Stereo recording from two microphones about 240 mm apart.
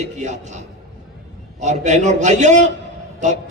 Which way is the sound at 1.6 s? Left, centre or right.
Right.